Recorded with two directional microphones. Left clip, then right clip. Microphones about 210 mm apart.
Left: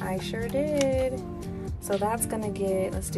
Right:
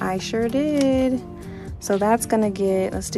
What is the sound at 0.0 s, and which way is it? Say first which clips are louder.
Speech: right 8 dB; 30° right (ahead or behind).